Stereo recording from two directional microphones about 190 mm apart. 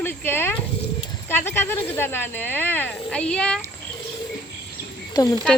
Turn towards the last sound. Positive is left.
turn(degrees=20)  # may be behind; listen again after turning